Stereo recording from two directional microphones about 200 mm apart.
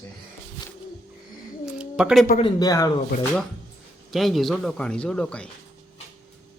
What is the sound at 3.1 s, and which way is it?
Speech, 45° left (ahead or behind).